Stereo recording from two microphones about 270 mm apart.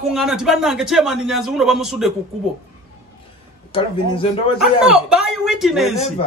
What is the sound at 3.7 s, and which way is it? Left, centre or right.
Speech, centre.